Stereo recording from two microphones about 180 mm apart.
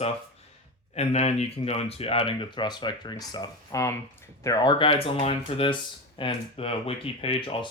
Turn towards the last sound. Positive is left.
turn(degrees=30)  # may be behind; listen again after turning